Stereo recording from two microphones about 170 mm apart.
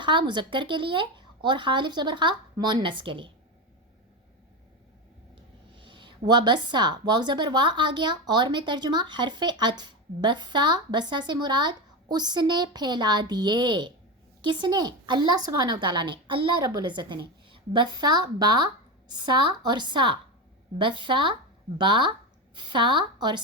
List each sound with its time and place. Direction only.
0.0 s speech: 30° right (ahead or behind)
5.7 s speech: 30° right (ahead or behind)